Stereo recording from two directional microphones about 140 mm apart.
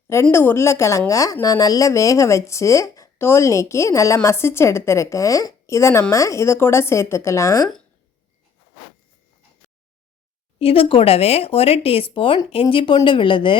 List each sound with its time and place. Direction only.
0.1 s a woman's voice: 20° left (ahead or behind)
10.6 s speech: 40° left (ahead or behind)